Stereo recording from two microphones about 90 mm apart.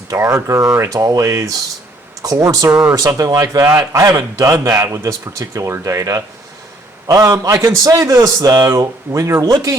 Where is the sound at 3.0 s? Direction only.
40° right (ahead or behind).